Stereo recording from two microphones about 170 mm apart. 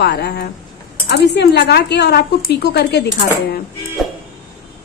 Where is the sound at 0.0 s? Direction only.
75° left (ahead or behind).